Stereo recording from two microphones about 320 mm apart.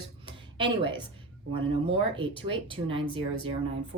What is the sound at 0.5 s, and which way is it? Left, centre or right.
Speech, centre.